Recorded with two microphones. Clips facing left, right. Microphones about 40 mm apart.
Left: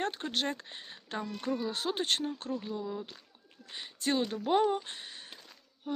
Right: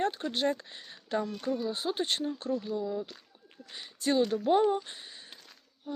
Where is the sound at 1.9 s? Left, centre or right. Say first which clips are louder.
Left 1 dB; left.